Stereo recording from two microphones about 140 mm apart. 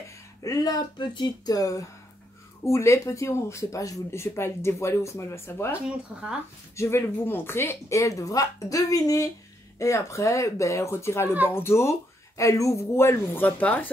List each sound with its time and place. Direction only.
0.4 s speech: 25° left (ahead or behind)
6.8 s speech: 15° left (ahead or behind)